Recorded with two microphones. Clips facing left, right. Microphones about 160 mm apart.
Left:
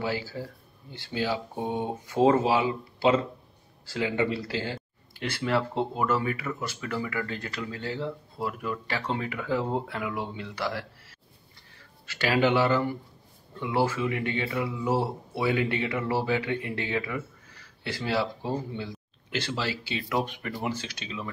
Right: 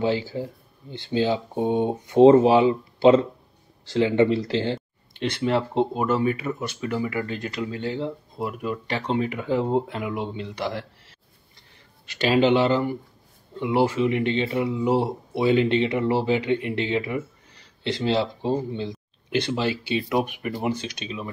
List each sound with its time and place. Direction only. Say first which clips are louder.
0.0 s speech: right 7 dB; 20° right (ahead or behind)
12.2 s speech: right 5 dB; 20° right (ahead or behind)